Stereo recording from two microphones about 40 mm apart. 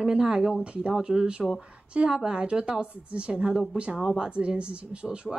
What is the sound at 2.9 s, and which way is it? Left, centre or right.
Speech, right.